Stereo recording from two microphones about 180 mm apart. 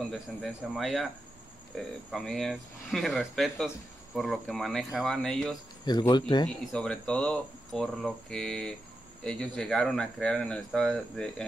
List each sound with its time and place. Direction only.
0.1 s speech: centre (ahead or behind)
5.9 s speech: 25° left (ahead or behind)
6.4 s speech: 5° left (ahead or behind)